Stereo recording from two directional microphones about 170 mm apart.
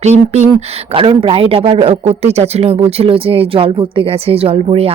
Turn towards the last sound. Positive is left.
turn(degrees=-35)  # may be behind; listen again after turning